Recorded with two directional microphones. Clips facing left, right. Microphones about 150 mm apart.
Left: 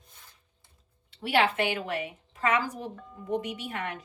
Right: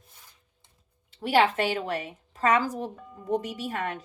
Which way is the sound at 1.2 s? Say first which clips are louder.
Right 3 dB; 40° right (ahead or behind).